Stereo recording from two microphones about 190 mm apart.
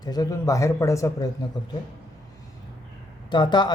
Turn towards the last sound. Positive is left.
turn(degrees=25)  # may be behind; listen again after turning